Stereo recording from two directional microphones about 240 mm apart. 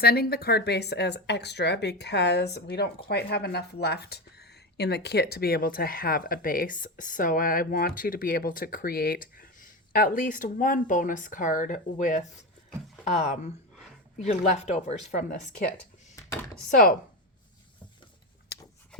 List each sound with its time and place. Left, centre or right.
0.0 s speech: left
16.3 s chopping: centre